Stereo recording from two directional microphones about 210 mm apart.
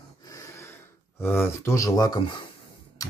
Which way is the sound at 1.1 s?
10° left (ahead or behind).